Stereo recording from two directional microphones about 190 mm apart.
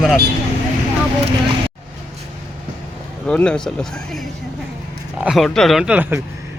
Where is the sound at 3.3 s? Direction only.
5° left (ahead or behind).